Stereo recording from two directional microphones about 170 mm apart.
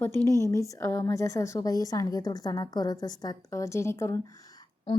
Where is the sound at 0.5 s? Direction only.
20° left (ahead or behind).